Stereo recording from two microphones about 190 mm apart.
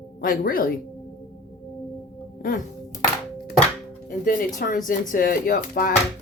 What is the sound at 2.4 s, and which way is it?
Music, 45° left (ahead or behind).